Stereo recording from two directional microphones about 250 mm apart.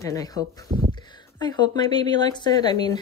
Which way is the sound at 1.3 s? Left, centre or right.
Centre.